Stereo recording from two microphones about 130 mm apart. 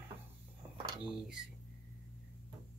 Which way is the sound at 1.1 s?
5° right (ahead or behind).